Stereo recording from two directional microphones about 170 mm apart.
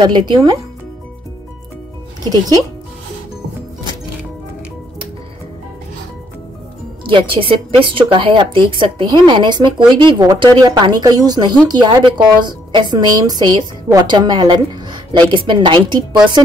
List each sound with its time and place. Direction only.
0.0 s a woman's voice: 25° right (ahead or behind)
2.2 s a woman's voice: 20° right (ahead or behind)
7.1 s a woman's voice: 30° right (ahead or behind)